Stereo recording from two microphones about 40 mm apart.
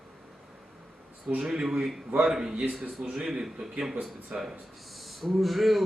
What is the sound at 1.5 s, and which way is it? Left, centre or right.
A man's voice, centre.